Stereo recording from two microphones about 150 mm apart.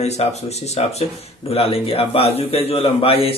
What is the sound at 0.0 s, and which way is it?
A man's voice, 45° left (ahead or behind).